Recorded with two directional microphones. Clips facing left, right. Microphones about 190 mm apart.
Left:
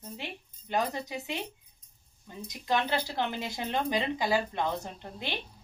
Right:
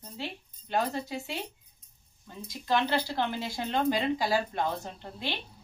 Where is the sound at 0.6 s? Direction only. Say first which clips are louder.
Right 1 dB; 20° left (ahead or behind).